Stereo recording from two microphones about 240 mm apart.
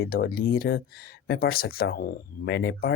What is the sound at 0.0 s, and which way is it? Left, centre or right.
Speech, left.